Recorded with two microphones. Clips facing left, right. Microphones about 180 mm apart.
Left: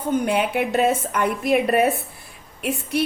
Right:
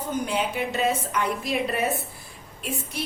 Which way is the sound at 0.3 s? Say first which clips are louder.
Left 6 dB; 60° left (ahead or behind).